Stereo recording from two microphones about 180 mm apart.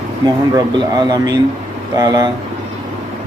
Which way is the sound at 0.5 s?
20° right (ahead or behind).